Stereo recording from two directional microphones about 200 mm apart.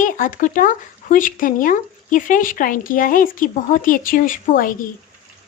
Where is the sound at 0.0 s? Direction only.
40° left (ahead or behind).